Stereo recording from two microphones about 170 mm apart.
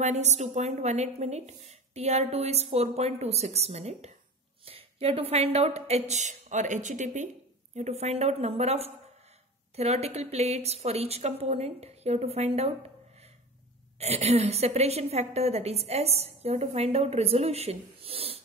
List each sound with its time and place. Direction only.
0.0 s a woman's voice: 40° right (ahead or behind)